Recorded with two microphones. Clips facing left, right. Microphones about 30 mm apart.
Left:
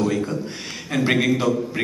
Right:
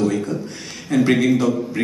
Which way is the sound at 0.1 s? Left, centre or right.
Centre.